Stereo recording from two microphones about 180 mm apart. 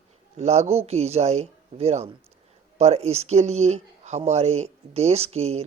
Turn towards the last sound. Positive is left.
turn(degrees=-35)  # may be behind; listen again after turning